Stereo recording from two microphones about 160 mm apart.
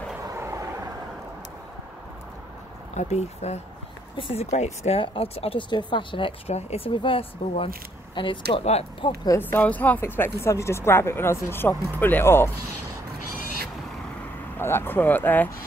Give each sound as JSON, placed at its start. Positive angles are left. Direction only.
{"t": 0.2, "sound": "vehicle", "side_deg": -20}
{"t": 2.9, "sound": "speech", "side_deg": 45}
{"t": 9.4, "sound": "speech", "side_deg": 10}
{"t": 14.6, "sound": "speech", "side_deg": 15}